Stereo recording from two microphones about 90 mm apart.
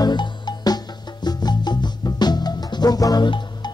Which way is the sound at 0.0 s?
55° left (ahead or behind).